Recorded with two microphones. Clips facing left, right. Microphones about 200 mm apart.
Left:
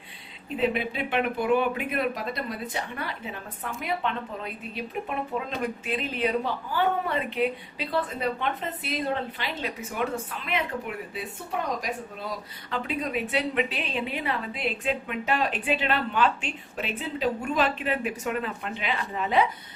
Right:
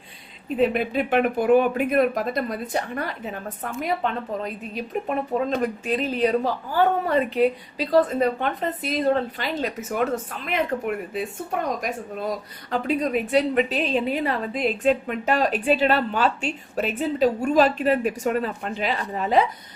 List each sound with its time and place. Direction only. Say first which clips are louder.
0.6 s speech: right 5 dB; 45° right (ahead or behind)
12.7 s a woman's voice: right 6 dB; 45° right (ahead or behind)